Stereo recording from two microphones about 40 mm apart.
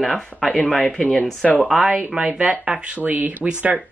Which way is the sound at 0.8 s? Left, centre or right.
Centre.